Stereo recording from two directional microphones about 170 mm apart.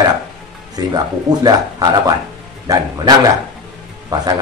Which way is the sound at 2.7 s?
20° right (ahead or behind).